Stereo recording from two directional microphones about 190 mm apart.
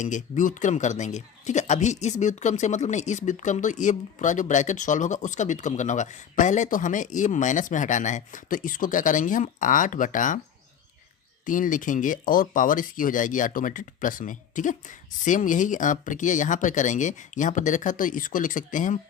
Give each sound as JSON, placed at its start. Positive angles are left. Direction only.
{"t": 0.0, "sound": "speech", "side_deg": 40}
{"t": 11.4, "sound": "speech", "side_deg": 45}